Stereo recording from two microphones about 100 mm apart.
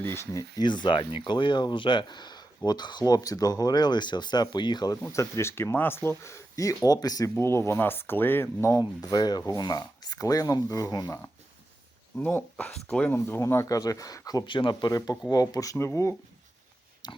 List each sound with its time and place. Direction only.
0.0 s speech: 25° left (ahead or behind)
0.6 s speech: 50° left (ahead or behind)
5.1 s speech: 30° left (ahead or behind)
7.3 s speech: 25° left (ahead or behind)
8.8 s speech: 40° left (ahead or behind)
12.1 s speech: 15° left (ahead or behind)
13.1 s speech: 20° left (ahead or behind); by 14.4 s 40° left (ahead or behind)
14.4 s speech: 55° left (ahead or behind)
14.9 s speech: 35° left (ahead or behind)
17.0 s pig: 45° left (ahead or behind)